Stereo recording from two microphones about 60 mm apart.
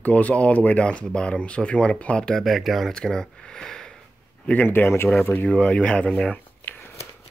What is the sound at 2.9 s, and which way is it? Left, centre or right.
Speech, centre.